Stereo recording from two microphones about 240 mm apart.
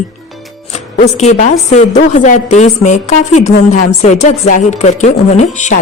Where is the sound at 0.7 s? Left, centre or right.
Left.